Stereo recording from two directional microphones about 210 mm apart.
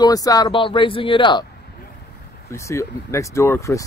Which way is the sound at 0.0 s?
15° left (ahead or behind).